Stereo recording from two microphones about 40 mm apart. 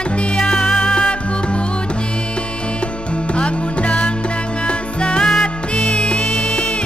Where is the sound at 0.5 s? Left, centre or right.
Left.